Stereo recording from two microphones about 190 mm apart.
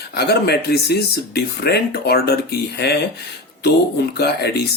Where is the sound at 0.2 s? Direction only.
60° left (ahead or behind).